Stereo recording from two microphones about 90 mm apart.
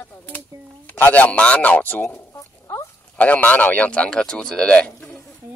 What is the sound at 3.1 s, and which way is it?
Speech, 15° left (ahead or behind).